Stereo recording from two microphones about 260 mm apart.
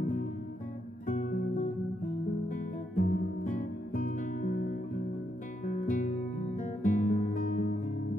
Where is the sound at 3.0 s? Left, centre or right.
Left.